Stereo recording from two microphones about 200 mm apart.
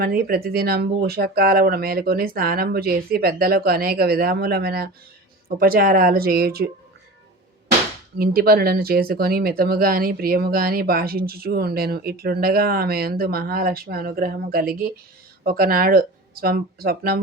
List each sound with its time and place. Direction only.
0.0 s speech: 50° right (ahead or behind)
8.2 s speech: 50° right (ahead or behind)